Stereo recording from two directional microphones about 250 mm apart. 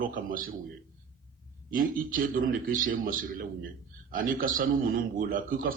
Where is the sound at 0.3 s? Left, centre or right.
Right.